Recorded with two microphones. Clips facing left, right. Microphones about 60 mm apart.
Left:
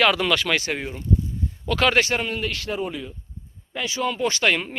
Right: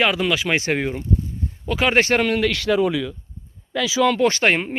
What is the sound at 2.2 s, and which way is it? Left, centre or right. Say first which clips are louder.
Speech: right 7 dB; right.